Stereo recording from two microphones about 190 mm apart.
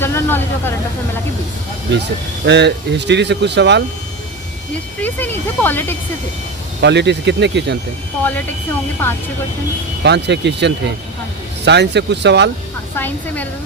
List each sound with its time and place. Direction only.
0.0 s speech: 10° left (ahead or behind)
1.9 s speech: 65° right (ahead or behind)
4.9 s speech: 10° left (ahead or behind)
6.8 s speech: 65° right (ahead or behind)
8.2 s speech: 10° left (ahead or behind)
10.0 s speech: 65° right (ahead or behind)
13.0 s speech: 10° left (ahead or behind)